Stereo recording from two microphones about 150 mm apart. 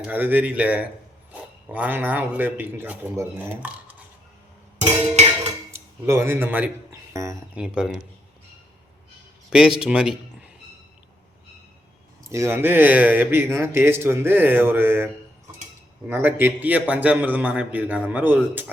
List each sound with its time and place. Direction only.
0.0 s speech: 15° right (ahead or behind)
4.8 s music: 45° right (ahead or behind)
5.7 s a man's voice: 20° right (ahead or behind)
7.5 s speech: 5° right (ahead or behind)
9.5 s speech: 5° right (ahead or behind)
12.2 s speech: 20° right (ahead or behind)